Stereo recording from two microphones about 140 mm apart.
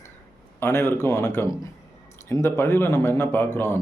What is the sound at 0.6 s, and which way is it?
A man's voice, 20° left (ahead or behind).